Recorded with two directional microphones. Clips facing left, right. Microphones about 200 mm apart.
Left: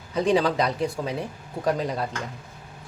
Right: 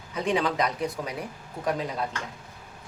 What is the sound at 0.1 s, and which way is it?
Speech, 35° left (ahead or behind).